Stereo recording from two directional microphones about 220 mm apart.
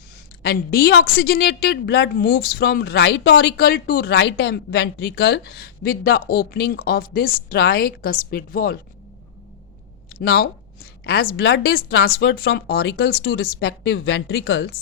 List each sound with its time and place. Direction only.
0.4 s a woman's voice: 45° left (ahead or behind)
10.2 s a woman's voice: 45° left (ahead or behind)